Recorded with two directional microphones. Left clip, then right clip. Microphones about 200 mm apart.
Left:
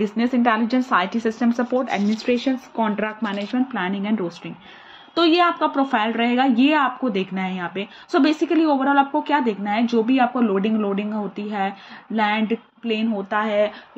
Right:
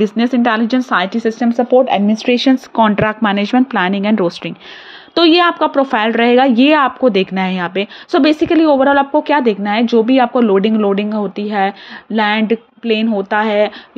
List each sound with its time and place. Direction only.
0.0 s speech: 25° right (ahead or behind)
2.2 s a woman's voice: 55° right (ahead or behind)